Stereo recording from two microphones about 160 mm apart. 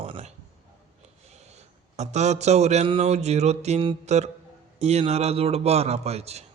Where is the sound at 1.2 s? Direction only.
45° right (ahead or behind).